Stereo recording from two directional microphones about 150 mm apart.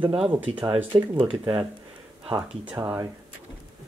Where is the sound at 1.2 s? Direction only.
30° right (ahead or behind).